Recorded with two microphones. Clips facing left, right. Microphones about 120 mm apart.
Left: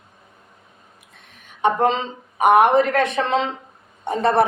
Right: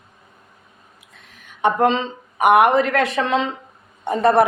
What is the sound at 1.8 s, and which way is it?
Speech, 80° right.